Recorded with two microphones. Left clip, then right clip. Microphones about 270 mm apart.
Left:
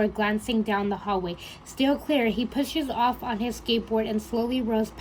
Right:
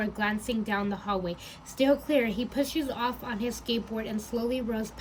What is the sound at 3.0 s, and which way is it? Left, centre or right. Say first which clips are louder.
A woman's voice: left 6 dB; left.